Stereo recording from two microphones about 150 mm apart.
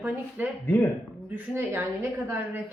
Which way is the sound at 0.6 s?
15° left (ahead or behind).